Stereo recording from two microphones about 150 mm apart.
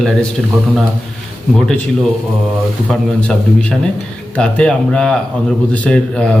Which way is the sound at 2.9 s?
10° left (ahead or behind).